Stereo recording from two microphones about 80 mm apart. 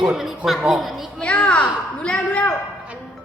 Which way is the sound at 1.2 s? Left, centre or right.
Centre.